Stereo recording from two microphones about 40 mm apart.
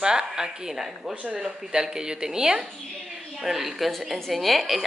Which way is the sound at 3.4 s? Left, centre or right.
Centre.